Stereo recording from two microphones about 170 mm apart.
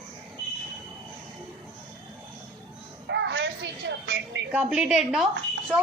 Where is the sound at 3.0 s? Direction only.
90° right.